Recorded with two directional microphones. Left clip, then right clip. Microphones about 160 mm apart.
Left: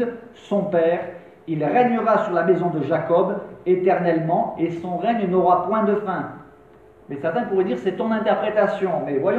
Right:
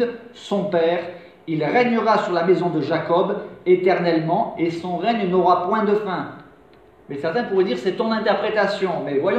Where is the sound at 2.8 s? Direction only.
30° right (ahead or behind).